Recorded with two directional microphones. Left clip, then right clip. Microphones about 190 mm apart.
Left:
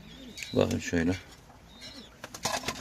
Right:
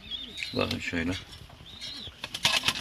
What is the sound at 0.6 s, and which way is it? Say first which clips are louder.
Speech: left 3 dB; 30° left (ahead or behind).